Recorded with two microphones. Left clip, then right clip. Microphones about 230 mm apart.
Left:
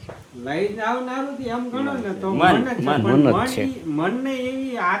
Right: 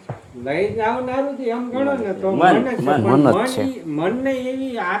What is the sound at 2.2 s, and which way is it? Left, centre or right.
Speech, left.